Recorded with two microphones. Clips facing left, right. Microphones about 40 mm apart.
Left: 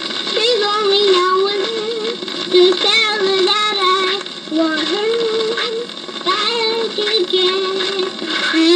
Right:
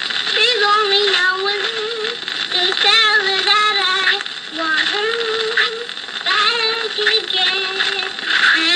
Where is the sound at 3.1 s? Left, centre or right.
Right.